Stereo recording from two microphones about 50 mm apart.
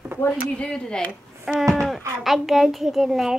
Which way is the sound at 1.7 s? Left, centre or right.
Centre.